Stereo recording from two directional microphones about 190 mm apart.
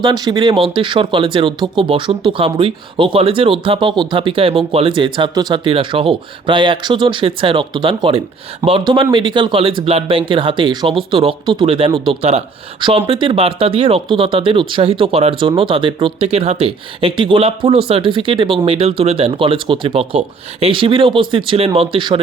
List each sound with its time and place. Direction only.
0.0 s speech: 25° right (ahead or behind)